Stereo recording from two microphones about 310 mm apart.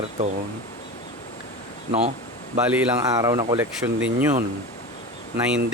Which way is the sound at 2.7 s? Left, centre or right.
Centre.